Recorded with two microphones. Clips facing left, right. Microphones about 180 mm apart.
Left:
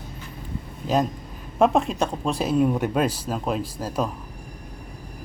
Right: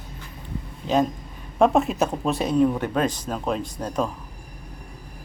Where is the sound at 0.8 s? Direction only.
Centre (ahead or behind).